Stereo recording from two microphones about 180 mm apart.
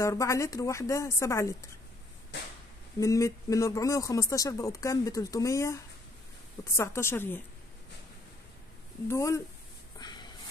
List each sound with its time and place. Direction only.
0.0 s speech: 15° left (ahead or behind)
3.0 s speech: 15° left (ahead or behind)
9.0 s speech: 15° left (ahead or behind)
9.9 s a sound: 25° left (ahead or behind)